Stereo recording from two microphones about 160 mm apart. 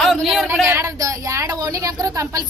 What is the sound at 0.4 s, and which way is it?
A woman's voice, 15° right (ahead or behind).